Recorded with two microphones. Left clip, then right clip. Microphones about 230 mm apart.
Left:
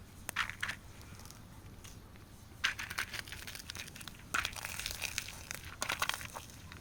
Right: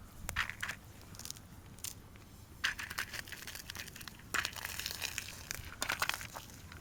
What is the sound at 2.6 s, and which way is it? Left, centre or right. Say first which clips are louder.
Crushing: left 1 dB; centre.